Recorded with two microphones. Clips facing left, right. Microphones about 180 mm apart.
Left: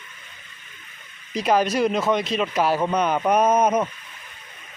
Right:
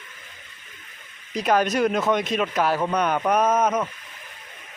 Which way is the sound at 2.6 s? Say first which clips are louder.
Left 2 dB; 10° left (ahead or behind).